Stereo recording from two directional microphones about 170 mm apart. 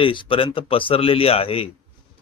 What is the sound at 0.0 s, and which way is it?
Speech, 30° left (ahead or behind).